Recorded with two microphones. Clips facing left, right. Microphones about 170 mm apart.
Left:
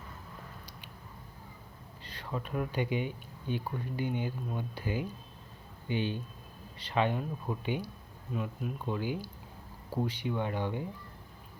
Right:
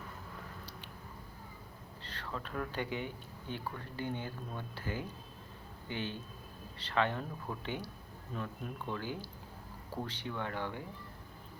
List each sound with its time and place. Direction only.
2.0 s speech: 15° left (ahead or behind)